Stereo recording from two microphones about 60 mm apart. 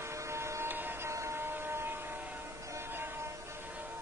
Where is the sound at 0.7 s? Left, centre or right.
Right.